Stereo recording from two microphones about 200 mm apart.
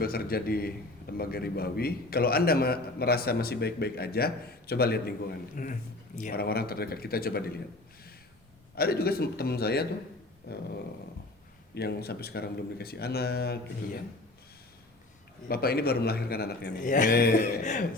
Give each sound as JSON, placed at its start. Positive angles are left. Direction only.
{"t": 0.0, "sound": "a man's voice", "side_deg": 50}
{"t": 5.6, "sound": "a man's voice", "side_deg": 40}
{"t": 8.7, "sound": "a man's voice", "side_deg": 50}
{"t": 11.7, "sound": "a man's voice", "side_deg": 55}
{"t": 15.4, "sound": "a man's voice", "side_deg": 50}